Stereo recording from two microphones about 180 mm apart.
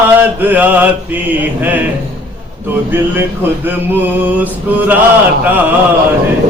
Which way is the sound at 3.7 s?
10° right (ahead or behind).